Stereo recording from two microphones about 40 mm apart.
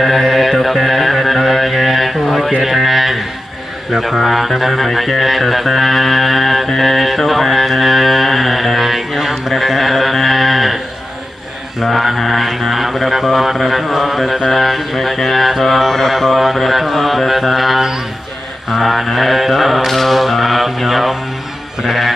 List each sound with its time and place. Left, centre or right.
0.0 s music: centre
2.6 s a sound: centre
3.9 s speech: centre
11.8 s music: centre
18.7 s mantra: centre
21.8 s music: centre